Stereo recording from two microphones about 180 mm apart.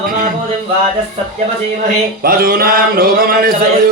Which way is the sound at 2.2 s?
55° right (ahead or behind).